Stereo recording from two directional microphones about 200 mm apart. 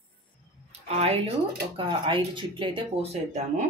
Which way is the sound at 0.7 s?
30° right (ahead or behind).